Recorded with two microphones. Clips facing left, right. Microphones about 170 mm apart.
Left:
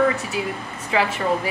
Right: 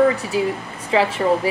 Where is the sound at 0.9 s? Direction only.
30° right (ahead or behind).